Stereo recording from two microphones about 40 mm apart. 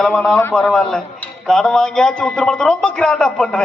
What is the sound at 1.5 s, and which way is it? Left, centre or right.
A man's voice, centre.